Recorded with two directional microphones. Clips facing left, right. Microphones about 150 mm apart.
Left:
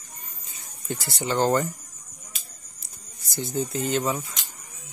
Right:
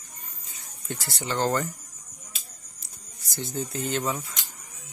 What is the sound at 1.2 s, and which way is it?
Speech, 15° left (ahead or behind).